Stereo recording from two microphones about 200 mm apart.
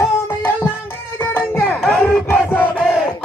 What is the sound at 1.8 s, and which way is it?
Crowd, centre (ahead or behind).